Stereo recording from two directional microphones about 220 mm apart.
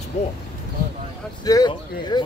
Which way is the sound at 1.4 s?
15° left (ahead or behind).